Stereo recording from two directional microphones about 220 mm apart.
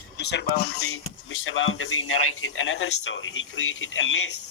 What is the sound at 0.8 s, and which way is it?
Speech, 70° left (ahead or behind).